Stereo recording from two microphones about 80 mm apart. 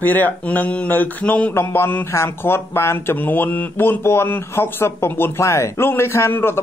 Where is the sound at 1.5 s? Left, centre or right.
Left.